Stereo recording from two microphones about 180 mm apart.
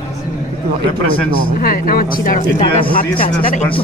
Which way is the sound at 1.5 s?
55° left (ahead or behind).